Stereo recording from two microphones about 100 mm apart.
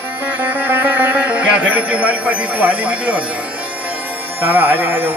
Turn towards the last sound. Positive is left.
turn(degrees=-20)  # may be behind; listen again after turning